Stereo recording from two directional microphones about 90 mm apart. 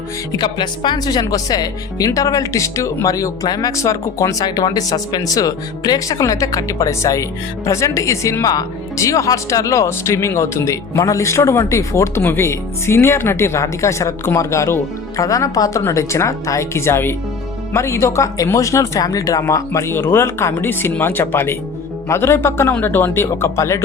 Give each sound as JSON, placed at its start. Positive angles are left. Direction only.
{"t": 0.3, "sound": "speech", "side_deg": 50}